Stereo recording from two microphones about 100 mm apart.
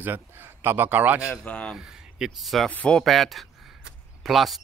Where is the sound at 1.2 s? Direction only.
15° left (ahead or behind).